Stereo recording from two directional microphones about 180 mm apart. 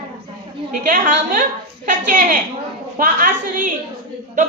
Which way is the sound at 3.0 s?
50° right (ahead or behind).